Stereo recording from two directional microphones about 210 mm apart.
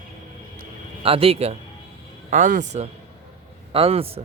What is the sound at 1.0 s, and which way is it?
A man's voice, 25° right (ahead or behind).